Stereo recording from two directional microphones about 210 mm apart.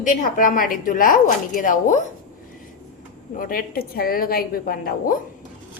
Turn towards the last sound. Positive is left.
turn(degrees=40)  # may be behind; listen again after turning